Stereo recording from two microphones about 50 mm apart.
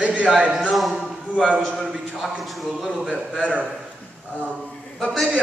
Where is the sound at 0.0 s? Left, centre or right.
Right.